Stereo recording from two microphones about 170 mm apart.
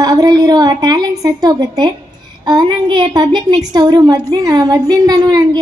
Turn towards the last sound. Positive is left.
turn(degrees=-25)  # may be behind; listen again after turning